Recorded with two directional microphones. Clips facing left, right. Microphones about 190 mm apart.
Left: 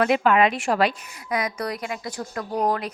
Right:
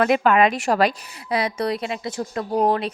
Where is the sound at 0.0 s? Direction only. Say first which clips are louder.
Right 2 dB; 50° right (ahead or behind).